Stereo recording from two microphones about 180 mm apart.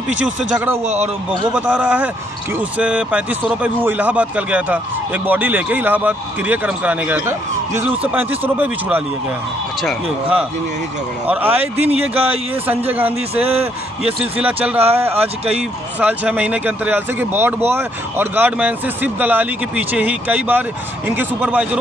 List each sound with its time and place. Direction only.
0.2 s speech: 5° right (ahead or behind)
11.2 s speech: 10° right (ahead or behind)
11.8 s speech: 35° right (ahead or behind)
12.6 s speech: 10° right (ahead or behind)